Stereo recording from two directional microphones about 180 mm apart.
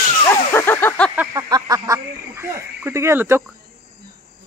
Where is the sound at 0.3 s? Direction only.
15° left (ahead or behind).